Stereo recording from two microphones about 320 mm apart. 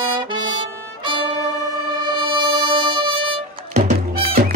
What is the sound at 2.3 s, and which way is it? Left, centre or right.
Music, centre.